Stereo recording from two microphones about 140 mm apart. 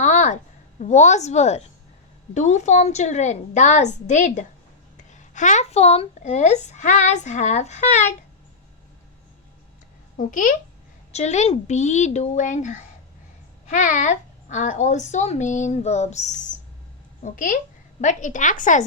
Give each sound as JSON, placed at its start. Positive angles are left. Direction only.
{"t": 0.0, "sound": "a sound", "side_deg": 60}
{"t": 0.8, "sound": "a woman's voice", "side_deg": 60}
{"t": 10.2, "sound": "a child's voice", "side_deg": 70}
{"t": 11.1, "sound": "a woman's voice", "side_deg": 55}
{"t": 17.2, "sound": "a child's voice", "side_deg": 70}